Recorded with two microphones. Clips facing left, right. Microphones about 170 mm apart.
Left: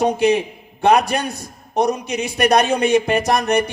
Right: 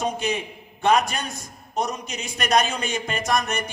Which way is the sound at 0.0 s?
65° left (ahead or behind).